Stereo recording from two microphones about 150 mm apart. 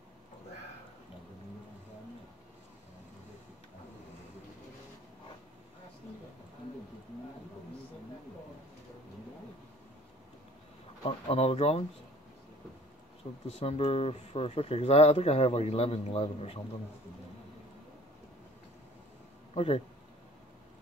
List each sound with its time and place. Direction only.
11.1 s speech: 40° left (ahead or behind)
13.2 s speech: 45° left (ahead or behind)
19.5 s speech: 40° left (ahead or behind)